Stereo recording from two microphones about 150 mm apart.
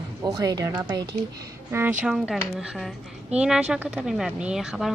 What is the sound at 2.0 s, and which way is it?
Speech, 5° right (ahead or behind).